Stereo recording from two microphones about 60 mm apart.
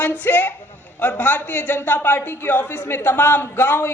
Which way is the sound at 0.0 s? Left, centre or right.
Left.